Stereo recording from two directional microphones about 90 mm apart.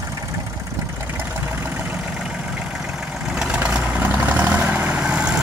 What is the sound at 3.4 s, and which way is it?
Vehicle, 15° right (ahead or behind).